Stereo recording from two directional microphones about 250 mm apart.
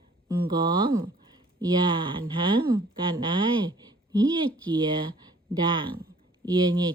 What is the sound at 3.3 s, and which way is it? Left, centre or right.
Speech, centre.